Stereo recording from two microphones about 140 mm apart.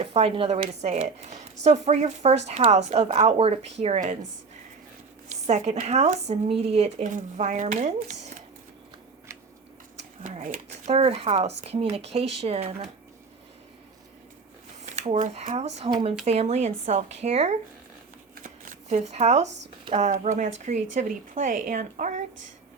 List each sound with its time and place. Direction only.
0.0 s speech: 45° right (ahead or behind)
5.3 s speech: 55° right (ahead or behind)
7.0 s speech: 60° right (ahead or behind)
10.0 s speech: 55° right (ahead or behind)
14.9 s speech: 55° right (ahead or behind)
15.9 s speech: 35° right (ahead or behind)
16.2 s speech: 50° right (ahead or behind)
18.4 s shuffling cards: 65° right (ahead or behind)
19.9 s speech: 55° right (ahead or behind)